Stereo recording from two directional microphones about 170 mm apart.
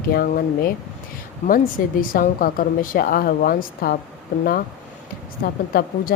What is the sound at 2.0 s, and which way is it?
A woman's voice, 55° left (ahead or behind).